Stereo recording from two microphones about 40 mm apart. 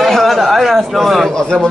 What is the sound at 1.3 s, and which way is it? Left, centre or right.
Speech, left.